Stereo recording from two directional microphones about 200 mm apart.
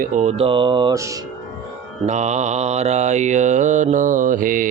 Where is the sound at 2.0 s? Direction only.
35° right (ahead or behind).